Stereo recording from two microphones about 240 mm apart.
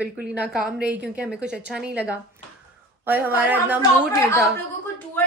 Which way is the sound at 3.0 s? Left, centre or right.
Centre.